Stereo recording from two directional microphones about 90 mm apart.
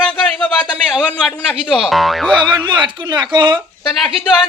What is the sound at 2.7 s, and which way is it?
Speech, 55° right (ahead or behind).